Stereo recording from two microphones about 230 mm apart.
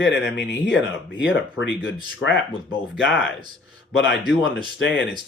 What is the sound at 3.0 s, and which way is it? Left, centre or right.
Speech, left.